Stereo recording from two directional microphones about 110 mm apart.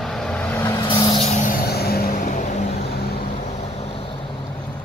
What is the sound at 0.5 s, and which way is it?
Vehicle, 25° left (ahead or behind).